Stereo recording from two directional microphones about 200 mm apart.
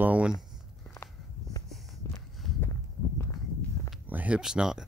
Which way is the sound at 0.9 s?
15° left (ahead or behind).